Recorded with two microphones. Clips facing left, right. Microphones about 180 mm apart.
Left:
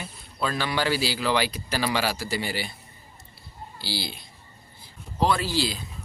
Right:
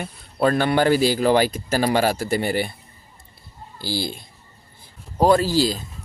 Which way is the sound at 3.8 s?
45° right (ahead or behind).